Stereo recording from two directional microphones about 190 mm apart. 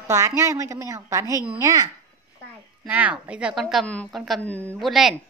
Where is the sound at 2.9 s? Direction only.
10° right (ahead or behind); by 4.7 s 10° left (ahead or behind).